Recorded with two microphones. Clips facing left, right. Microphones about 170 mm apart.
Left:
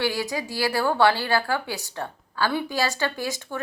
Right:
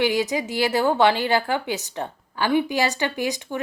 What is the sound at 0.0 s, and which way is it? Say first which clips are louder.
A woman's voice: right 5 dB; 20° right (ahead or behind).